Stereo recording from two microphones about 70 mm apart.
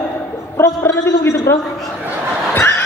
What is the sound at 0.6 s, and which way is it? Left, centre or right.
Speech, left.